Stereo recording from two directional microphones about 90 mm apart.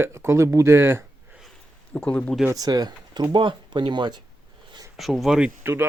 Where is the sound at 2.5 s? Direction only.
45° right (ahead or behind).